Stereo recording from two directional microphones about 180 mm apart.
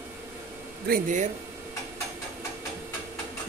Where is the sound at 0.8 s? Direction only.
50° right (ahead or behind).